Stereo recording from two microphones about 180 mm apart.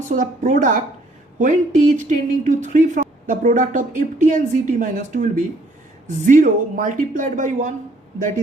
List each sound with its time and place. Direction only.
0.0 s speech: 45° right (ahead or behind)